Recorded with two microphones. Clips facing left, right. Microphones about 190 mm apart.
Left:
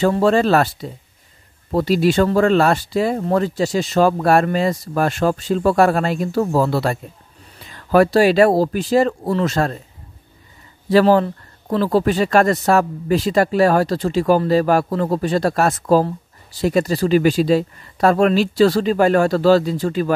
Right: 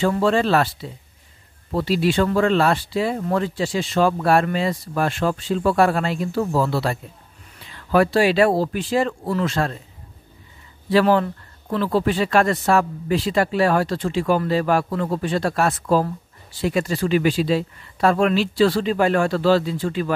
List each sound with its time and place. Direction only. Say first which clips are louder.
0.0 s speech: left 4 dB; 40° left (ahead or behind)
10.9 s speech: left 4 dB; 40° left (ahead or behind)